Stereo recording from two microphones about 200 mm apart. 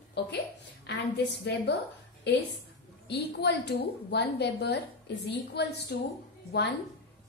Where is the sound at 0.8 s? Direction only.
60° left (ahead or behind).